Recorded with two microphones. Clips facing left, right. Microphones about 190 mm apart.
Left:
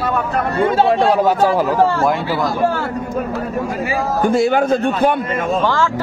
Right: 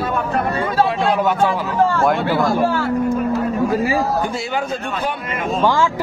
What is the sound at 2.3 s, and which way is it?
Speech, 55° right (ahead or behind).